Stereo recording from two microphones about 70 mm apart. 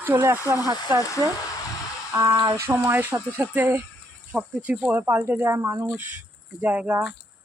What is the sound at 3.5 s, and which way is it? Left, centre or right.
Speech, right.